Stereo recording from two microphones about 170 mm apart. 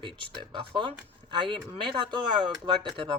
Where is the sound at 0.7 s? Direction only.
30° right (ahead or behind).